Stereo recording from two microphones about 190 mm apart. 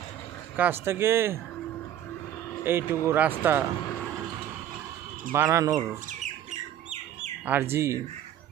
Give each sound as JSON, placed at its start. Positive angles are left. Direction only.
{"t": 0.5, "sound": "speech", "side_deg": -10}
{"t": 2.6, "sound": "speech", "side_deg": -10}
{"t": 5.3, "sound": "speech", "side_deg": -15}
{"t": 6.1, "sound": "bird", "side_deg": -40}
{"t": 7.4, "sound": "speech", "side_deg": -10}